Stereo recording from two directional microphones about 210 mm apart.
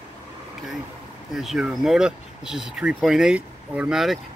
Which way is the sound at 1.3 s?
Centre (ahead or behind).